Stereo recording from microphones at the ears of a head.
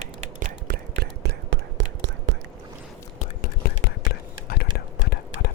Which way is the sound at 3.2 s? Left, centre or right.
Left.